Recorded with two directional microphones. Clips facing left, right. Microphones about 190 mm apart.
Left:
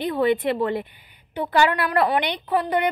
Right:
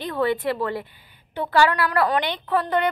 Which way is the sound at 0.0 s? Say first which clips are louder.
Left 2 dB; 15° left (ahead or behind).